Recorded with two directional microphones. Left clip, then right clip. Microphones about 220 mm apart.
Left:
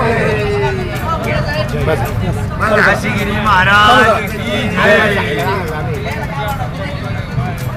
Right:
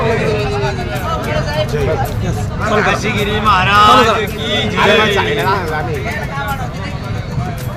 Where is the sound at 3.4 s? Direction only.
35° right (ahead or behind).